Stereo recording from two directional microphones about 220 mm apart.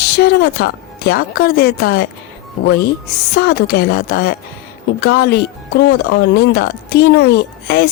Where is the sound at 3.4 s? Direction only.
45° left (ahead or behind).